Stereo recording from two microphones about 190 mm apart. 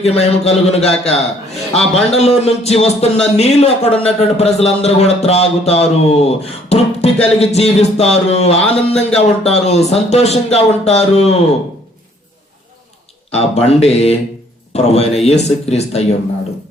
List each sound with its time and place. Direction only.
0.0 s a man's voice: 35° left (ahead or behind)
13.3 s a man's voice: 35° left (ahead or behind)